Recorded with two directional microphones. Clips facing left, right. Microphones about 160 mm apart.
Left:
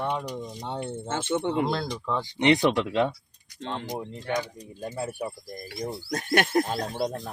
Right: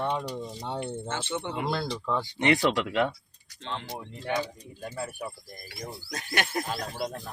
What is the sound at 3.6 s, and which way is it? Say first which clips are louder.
Speech: left 3 dB; 45° left (ahead or behind).